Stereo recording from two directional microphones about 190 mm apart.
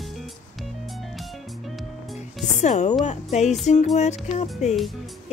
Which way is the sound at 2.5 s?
35° left (ahead or behind).